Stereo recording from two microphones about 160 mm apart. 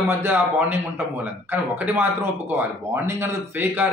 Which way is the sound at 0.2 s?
15° right (ahead or behind).